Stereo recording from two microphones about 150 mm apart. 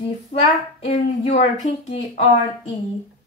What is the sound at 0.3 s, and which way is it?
A child's voice, 45° left (ahead or behind).